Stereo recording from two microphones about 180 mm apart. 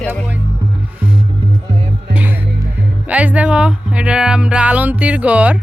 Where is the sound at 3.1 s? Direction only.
10° right (ahead or behind).